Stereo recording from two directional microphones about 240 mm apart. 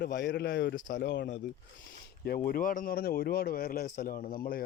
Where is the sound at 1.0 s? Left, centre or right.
Left.